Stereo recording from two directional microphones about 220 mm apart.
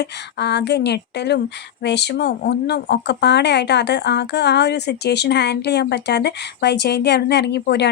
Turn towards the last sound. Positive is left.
turn(degrees=50)  # may be behind; listen again after turning